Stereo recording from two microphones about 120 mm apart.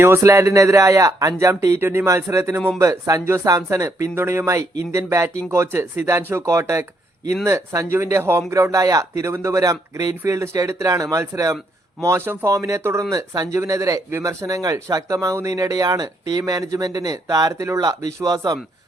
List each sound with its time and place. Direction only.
0.0 s speech: 25° right (ahead or behind)